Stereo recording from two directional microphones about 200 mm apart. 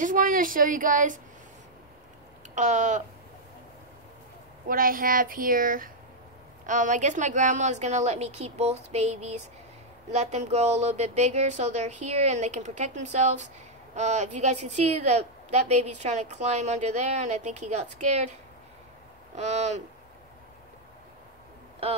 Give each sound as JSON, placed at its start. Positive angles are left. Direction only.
{"t": 0.0, "sound": "speech", "side_deg": -45}
{"t": 2.5, "sound": "a woman's voice", "side_deg": -35}
{"t": 4.6, "sound": "a woman's voice", "side_deg": -45}
{"t": 19.3, "sound": "a woman's voice", "side_deg": -35}